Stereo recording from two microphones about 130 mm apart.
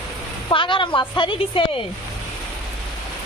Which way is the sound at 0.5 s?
40° left (ahead or behind).